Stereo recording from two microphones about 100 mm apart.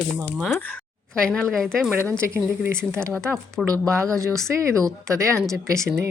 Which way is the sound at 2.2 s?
25° right (ahead or behind).